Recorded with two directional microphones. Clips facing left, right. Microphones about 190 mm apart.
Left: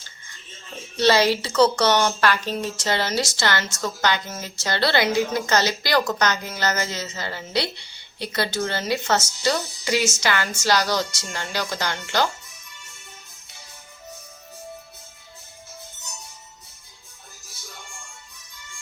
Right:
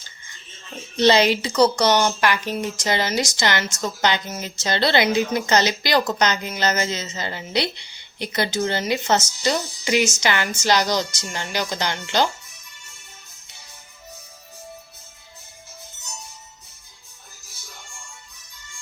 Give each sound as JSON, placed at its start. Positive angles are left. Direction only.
{"t": 0.9, "sound": "a woman's voice", "side_deg": -20}